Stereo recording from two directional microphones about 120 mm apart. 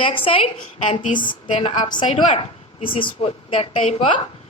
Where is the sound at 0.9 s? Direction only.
90° left.